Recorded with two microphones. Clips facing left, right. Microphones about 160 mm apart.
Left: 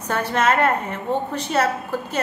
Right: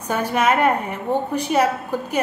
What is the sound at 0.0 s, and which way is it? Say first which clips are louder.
A woman's voice: right 1 dB; 10° right (ahead or behind).